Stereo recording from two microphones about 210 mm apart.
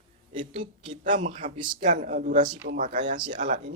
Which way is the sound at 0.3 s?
25° right (ahead or behind).